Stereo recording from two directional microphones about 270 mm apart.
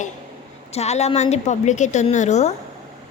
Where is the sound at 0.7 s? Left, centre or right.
Left.